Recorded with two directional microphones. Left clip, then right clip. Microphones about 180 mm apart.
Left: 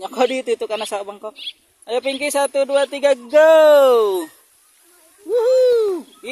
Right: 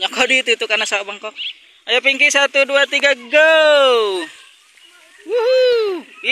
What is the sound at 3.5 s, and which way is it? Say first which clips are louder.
Speech: left 2 dB; 30° left (ahead or behind).